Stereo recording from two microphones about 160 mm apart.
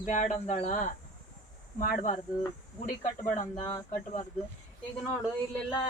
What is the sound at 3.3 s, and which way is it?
Speech, 50° left (ahead or behind).